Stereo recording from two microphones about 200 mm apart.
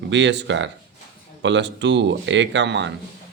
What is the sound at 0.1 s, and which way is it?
Speech, 65° right (ahead or behind).